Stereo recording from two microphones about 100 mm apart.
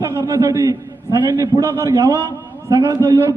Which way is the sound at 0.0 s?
30° right (ahead or behind).